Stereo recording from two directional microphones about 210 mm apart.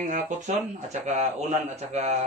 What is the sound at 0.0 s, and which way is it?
Speech, 35° right (ahead or behind).